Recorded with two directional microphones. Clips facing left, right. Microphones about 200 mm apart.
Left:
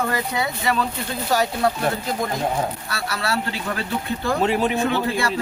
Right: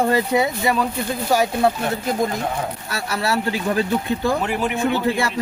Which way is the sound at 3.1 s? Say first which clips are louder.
Right 4 dB; 15° right (ahead or behind).